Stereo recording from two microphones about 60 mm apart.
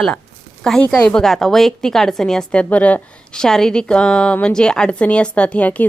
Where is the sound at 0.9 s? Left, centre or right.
Centre.